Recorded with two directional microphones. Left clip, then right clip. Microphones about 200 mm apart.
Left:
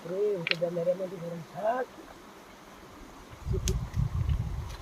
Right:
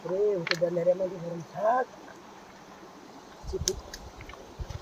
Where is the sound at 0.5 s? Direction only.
15° right (ahead or behind).